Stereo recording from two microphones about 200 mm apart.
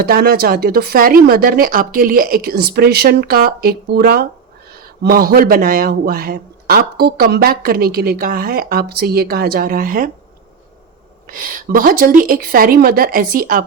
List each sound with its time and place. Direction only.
0.0 s a man's voice: 50° right (ahead or behind)
11.3 s a man's voice: 45° right (ahead or behind)